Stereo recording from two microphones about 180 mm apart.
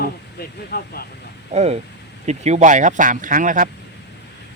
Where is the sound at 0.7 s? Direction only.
60° left (ahead or behind).